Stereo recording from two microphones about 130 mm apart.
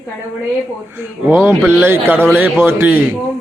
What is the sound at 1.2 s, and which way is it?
Speech, 15° right (ahead or behind).